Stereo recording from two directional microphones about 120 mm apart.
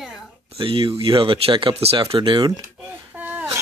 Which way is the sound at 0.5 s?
45° right (ahead or behind).